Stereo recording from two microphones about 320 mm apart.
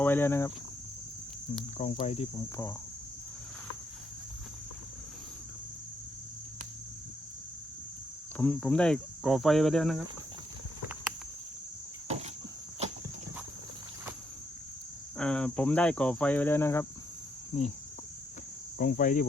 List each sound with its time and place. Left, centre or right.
0.0 s speech: centre
1.8 s cricket: centre
8.4 s speech: centre
12.0 s cricket: centre
12.8 s horse: centre
15.2 s speech: centre
17.5 s cricket: centre
18.8 s cricket: left